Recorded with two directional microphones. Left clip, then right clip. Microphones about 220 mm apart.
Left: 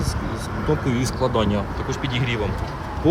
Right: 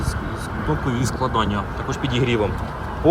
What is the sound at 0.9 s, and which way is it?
Speech, centre (ahead or behind).